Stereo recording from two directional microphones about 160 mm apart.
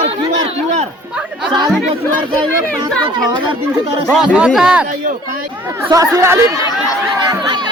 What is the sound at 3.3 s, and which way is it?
Speech, 30° right (ahead or behind).